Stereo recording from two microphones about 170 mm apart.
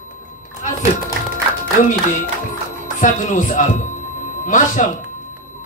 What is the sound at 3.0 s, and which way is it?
Speech, 50° left (ahead or behind).